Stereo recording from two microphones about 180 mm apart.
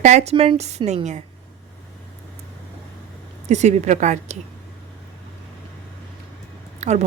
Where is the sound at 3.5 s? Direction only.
40° right (ahead or behind).